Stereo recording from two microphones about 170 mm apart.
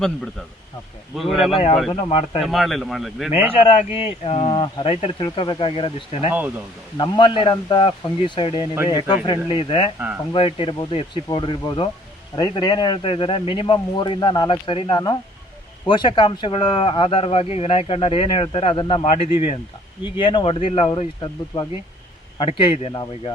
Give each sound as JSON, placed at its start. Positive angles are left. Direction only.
{"t": 1.1, "sound": "speech", "side_deg": 0}
{"t": 1.9, "sound": "speech", "side_deg": 30}
{"t": 2.4, "sound": "speech", "side_deg": 0}
{"t": 3.5, "sound": "a man's voice", "side_deg": 35}